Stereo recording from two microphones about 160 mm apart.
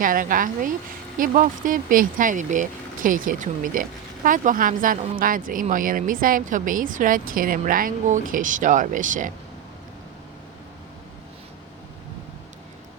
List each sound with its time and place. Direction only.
0.0 s speech: 60° right (ahead or behind)